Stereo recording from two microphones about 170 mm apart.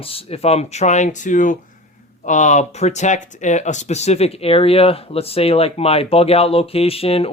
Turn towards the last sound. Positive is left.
turn(degrees=35)  # may be behind; listen again after turning